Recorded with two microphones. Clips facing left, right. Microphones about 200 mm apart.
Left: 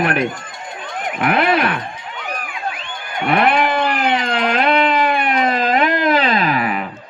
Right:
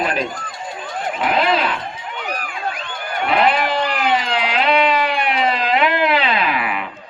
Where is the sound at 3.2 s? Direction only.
55° left (ahead or behind); by 6.8 s 40° left (ahead or behind).